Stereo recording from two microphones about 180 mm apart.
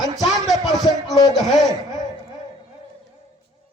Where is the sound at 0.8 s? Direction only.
20° left (ahead or behind).